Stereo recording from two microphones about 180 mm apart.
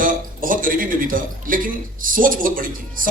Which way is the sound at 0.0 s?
50° right (ahead or behind).